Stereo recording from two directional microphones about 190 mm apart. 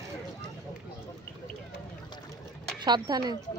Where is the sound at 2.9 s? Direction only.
20° right (ahead or behind).